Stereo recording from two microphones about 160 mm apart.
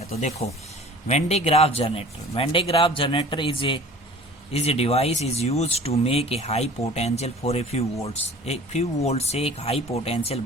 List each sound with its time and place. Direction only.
0.0 s speech: 45° left (ahead or behind)